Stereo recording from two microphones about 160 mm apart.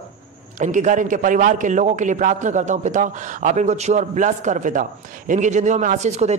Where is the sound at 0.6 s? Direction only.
50° right (ahead or behind).